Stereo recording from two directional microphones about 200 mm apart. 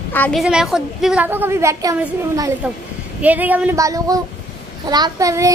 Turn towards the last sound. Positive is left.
turn(degrees=-15)  # may be behind; listen again after turning